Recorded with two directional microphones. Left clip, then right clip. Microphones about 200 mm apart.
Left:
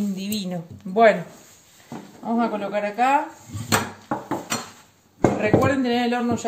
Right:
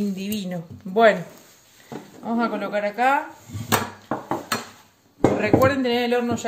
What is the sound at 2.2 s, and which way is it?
Speech, 20° right (ahead or behind).